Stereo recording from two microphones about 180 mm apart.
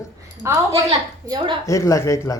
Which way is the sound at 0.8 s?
25° right (ahead or behind).